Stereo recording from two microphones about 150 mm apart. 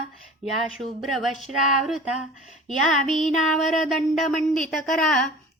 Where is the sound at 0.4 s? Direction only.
Centre (ahead or behind).